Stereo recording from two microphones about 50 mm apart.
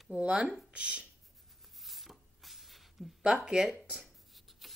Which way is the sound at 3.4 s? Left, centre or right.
Centre.